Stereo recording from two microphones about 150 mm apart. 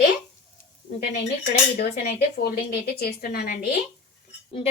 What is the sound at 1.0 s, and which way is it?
A woman's voice, 85° left.